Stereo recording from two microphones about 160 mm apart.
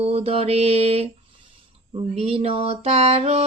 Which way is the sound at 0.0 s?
40° right (ahead or behind).